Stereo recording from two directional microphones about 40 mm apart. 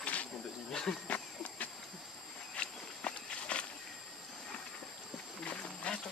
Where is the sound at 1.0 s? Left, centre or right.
Left.